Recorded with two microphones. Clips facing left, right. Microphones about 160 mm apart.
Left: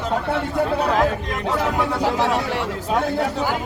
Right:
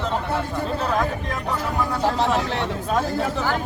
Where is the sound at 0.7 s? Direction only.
70° left (ahead or behind).